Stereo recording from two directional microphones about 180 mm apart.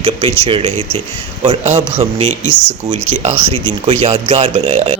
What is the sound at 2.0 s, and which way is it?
Speech, 40° right (ahead or behind).